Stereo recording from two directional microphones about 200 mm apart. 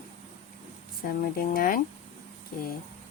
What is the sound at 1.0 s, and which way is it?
Speech, 45° left (ahead or behind).